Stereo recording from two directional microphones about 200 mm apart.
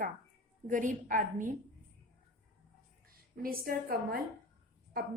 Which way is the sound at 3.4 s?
45° right (ahead or behind).